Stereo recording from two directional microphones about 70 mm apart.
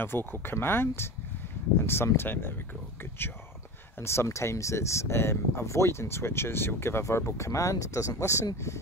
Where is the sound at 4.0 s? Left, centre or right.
Left.